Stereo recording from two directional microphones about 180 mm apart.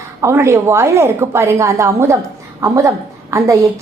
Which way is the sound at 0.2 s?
15° right (ahead or behind).